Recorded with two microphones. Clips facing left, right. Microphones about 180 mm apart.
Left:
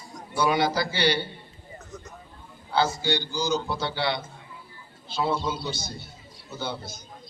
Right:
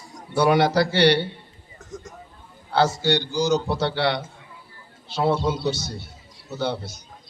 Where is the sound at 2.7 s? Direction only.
70° right (ahead or behind).